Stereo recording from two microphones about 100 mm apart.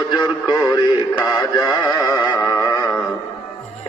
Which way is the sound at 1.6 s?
35° left (ahead or behind).